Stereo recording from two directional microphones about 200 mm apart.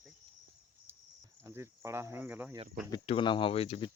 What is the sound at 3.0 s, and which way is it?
Speech, 25° left (ahead or behind).